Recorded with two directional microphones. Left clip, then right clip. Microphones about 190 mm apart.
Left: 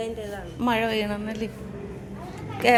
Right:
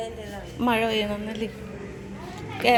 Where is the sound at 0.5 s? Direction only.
10° right (ahead or behind).